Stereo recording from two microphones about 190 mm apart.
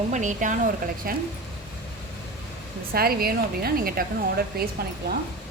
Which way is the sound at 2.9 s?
50° right (ahead or behind).